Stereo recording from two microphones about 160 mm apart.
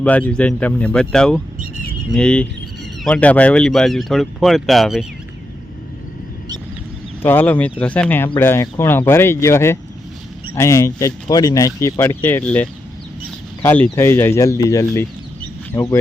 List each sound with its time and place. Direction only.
0.0 s speech: 10° left (ahead or behind)
7.2 s speech: 15° left (ahead or behind)